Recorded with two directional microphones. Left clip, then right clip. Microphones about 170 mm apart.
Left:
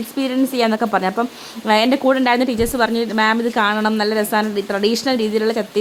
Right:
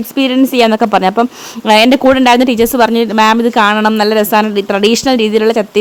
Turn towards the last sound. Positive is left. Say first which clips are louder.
# right 8 dB
turn(degrees=-45)  # may be behind; listen again after turning